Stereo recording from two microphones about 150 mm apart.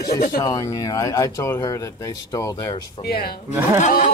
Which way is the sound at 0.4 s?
25° left (ahead or behind).